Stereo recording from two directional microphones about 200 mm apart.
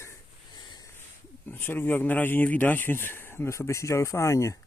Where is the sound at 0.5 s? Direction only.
20° left (ahead or behind).